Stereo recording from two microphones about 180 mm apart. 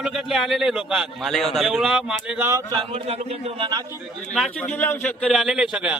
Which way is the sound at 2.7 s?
30° right (ahead or behind).